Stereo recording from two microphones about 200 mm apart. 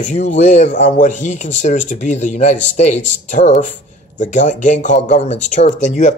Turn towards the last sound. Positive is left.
turn(degrees=35)  # may be behind; listen again after turning